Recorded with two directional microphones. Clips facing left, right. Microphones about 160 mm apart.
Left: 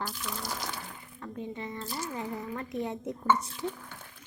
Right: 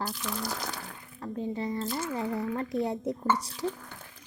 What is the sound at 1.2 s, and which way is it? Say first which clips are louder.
Speech: right 5 dB; 35° right (ahead or behind).